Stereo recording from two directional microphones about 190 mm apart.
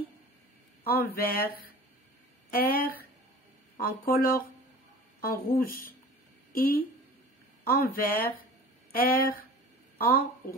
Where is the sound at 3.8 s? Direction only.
50° left (ahead or behind).